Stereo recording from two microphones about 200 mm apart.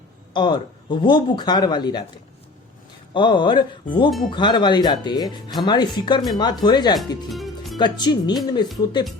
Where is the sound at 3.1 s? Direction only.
25° left (ahead or behind).